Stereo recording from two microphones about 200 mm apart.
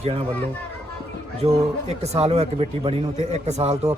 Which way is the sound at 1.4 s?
30° right (ahead or behind).